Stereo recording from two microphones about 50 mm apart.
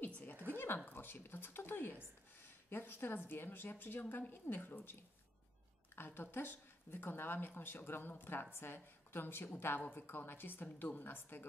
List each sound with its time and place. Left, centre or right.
0.0 s a sound: left
0.9 s speech: left
5.9 s a woman's voice: left